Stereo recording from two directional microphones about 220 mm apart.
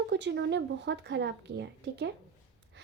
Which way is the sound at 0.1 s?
55° right (ahead or behind).